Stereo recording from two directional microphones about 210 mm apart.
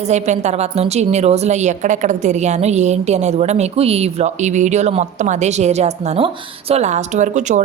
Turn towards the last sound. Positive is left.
turn(degrees=-35)  # may be behind; listen again after turning